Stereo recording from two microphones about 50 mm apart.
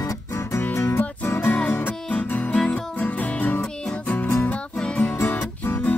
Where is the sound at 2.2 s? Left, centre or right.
Left.